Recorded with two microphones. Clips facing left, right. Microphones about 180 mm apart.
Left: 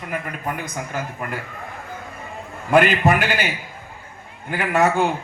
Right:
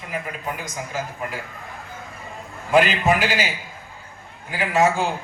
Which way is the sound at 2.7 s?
55° left (ahead or behind).